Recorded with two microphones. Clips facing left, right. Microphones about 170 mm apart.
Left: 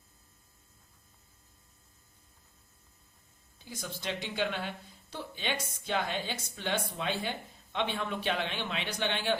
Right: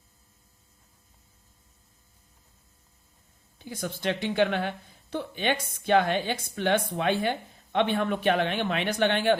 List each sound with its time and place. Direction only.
3.6 s a woman's voice: 60° right (ahead or behind)